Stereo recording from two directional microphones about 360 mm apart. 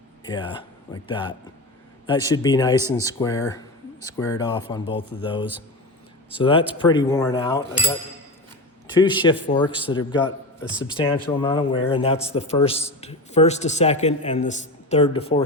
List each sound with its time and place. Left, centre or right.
0.3 s a man's voice: centre
9.0 s a man's voice: centre